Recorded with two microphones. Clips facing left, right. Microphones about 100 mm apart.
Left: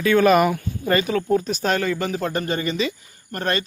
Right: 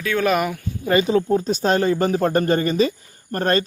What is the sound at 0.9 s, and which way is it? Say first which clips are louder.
Speech: right 2 dB; 25° right (ahead or behind).